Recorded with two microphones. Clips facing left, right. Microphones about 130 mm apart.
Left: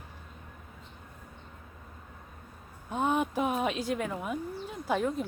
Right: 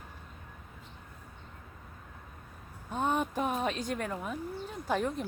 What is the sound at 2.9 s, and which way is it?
Speech, 10° left (ahead or behind).